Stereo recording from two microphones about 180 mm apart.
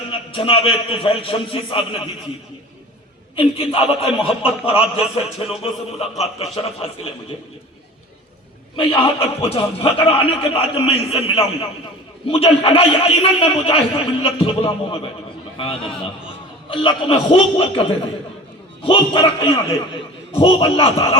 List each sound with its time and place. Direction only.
0.1 s a man's voice: 30° left (ahead or behind)
3.3 s a man's voice: 30° left (ahead or behind)
9.0 s a man's voice: 35° left (ahead or behind)
16.6 s a man's voice: 30° left (ahead or behind)